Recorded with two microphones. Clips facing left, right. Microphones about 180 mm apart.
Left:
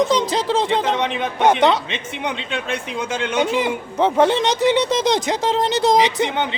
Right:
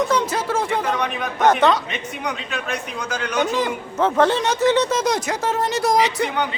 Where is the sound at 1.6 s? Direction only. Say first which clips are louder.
Left 1 dB; 20° left (ahead or behind).